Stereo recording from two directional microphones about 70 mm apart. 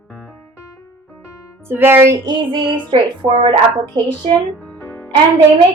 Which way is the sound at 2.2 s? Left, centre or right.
Right.